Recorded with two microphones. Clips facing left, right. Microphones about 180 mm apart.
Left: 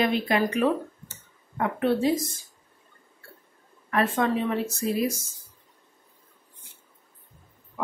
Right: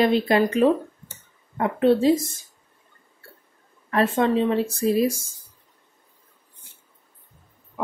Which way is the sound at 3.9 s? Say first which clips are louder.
Right 4 dB; 25° right (ahead or behind).